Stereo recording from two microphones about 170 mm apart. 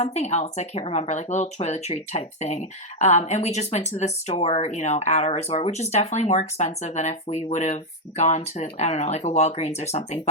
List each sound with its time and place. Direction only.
0.0 s speech: 40° left (ahead or behind)